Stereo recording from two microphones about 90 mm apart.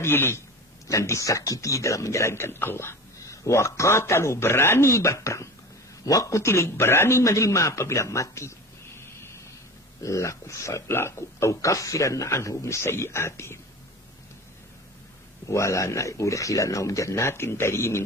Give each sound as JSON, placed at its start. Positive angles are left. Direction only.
{"t": 0.0, "sound": "a man's voice", "side_deg": 25}
{"t": 15.5, "sound": "speech", "side_deg": 35}